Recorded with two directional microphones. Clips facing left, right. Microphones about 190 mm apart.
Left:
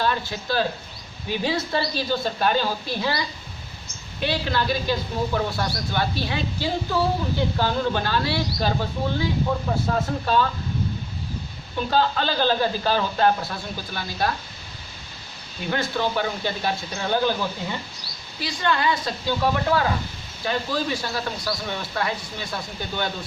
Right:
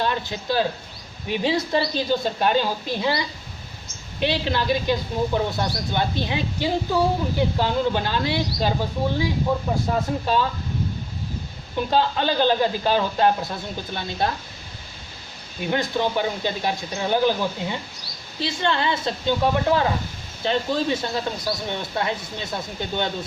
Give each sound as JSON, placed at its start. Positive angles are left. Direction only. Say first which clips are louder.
{"t": 0.0, "sound": "a man's voice", "louder": "even", "side_deg": -20}
{"t": 11.9, "sound": "a man's voice", "louder": "right 1 dB", "side_deg": -20}
{"t": 15.6, "sound": "a man's voice", "louder": "right 2 dB", "side_deg": -20}